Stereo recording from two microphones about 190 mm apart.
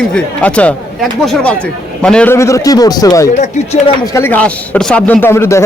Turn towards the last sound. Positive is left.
turn(degrees=15)  # may be behind; listen again after turning